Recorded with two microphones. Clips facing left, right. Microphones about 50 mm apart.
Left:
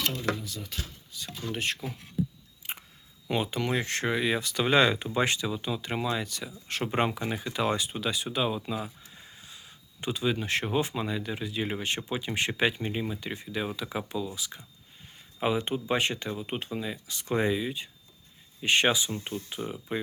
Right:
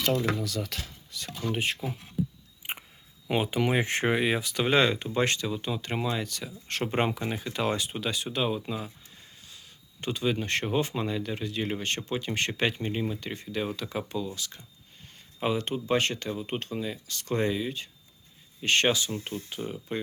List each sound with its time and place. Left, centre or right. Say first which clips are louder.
0.3 s speech: right 5 dB; right
1.5 s speech: even; centre
2.6 s chewing: right 3 dB; centre
3.2 s speech: right 3 dB; centre
4.4 s speech: even; centre
9.0 s a sound: left 2 dB; centre
10.0 s speech: even; centre